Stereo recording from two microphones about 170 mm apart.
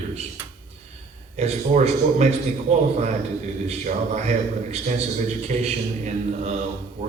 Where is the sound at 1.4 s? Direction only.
40° right (ahead or behind).